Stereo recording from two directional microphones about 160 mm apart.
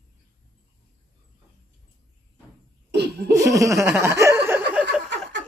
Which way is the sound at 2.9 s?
90° right.